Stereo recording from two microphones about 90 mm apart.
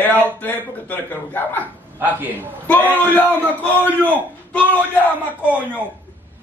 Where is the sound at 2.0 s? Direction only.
20° right (ahead or behind).